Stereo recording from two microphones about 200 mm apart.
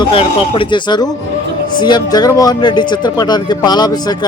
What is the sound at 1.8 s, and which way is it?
Speech, 20° left (ahead or behind).